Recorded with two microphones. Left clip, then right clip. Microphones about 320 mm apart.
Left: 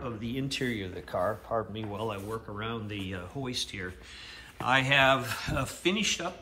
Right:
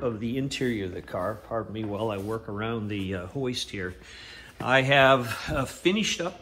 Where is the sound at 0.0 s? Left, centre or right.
Centre.